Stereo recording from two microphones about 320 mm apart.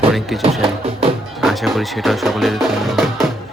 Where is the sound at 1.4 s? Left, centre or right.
Centre.